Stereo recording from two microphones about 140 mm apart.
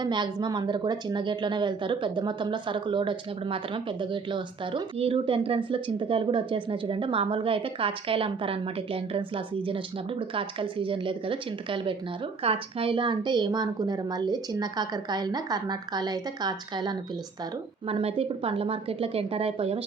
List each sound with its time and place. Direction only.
0.0 s a woman's voice: 30° right (ahead or behind)
17.8 s a woman's voice: 45° right (ahead or behind)